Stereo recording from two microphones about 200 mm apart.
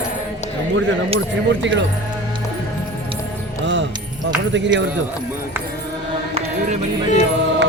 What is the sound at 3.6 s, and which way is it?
Music, 65° right (ahead or behind).